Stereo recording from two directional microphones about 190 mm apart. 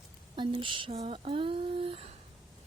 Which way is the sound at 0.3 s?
25° right (ahead or behind).